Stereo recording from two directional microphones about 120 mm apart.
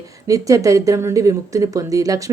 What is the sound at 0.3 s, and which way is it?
Speech, 25° right (ahead or behind).